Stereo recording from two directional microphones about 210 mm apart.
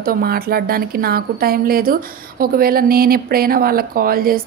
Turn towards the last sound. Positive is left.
turn(degrees=-45)  # may be behind; listen again after turning